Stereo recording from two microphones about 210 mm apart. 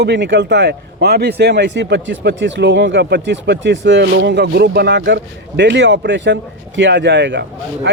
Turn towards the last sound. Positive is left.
turn(degrees=-60)  # may be behind; listen again after turning